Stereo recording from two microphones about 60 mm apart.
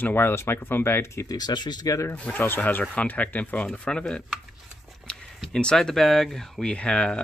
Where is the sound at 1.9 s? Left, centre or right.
Left.